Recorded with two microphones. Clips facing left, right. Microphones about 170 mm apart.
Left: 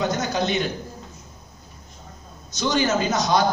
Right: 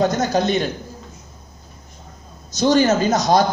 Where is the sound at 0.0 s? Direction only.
45° right (ahead or behind).